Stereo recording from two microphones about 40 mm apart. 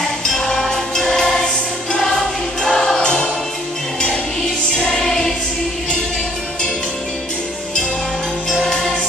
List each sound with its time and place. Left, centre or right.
0.0 s music: centre
4.7 s music: centre
8.6 s music: centre